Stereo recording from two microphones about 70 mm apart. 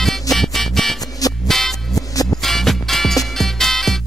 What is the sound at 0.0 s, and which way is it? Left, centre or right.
Music, centre.